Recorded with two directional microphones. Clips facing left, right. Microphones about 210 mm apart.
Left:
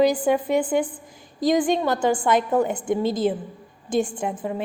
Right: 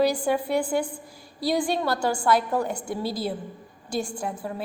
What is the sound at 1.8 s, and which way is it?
A woman's voice, 20° left (ahead or behind).